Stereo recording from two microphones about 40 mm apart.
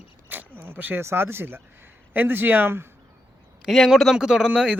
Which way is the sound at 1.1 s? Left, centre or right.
Right.